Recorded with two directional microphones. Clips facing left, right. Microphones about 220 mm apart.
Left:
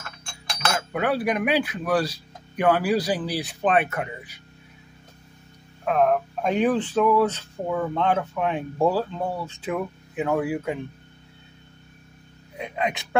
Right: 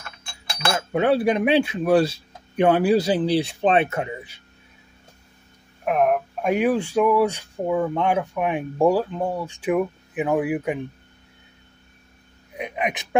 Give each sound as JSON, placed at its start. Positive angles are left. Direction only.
{"t": 0.9, "sound": "speech", "side_deg": -25}
{"t": 5.9, "sound": "speech", "side_deg": -15}
{"t": 12.5, "sound": "speech", "side_deg": -15}